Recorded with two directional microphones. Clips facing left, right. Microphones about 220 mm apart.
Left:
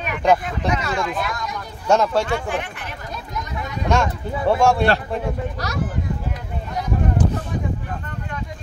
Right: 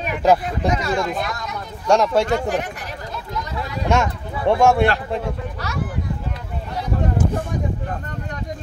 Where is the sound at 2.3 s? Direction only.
40° right (ahead or behind).